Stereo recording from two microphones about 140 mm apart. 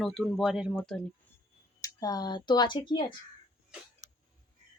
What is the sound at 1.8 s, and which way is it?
Speech, 25° left (ahead or behind).